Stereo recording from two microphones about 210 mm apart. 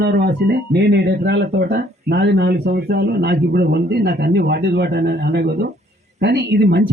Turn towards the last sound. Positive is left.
turn(degrees=-50)  # may be behind; listen again after turning